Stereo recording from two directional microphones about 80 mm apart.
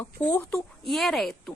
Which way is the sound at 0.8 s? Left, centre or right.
Centre.